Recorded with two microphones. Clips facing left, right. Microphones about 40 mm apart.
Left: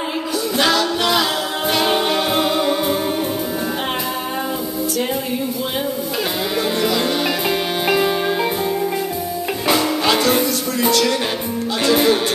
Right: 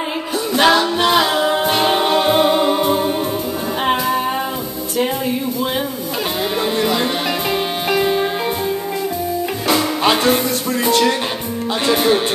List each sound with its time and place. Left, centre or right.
0.6 s music: right
1.9 s music: centre
6.8 s music: centre
10.0 s music: right
11.8 s speech: right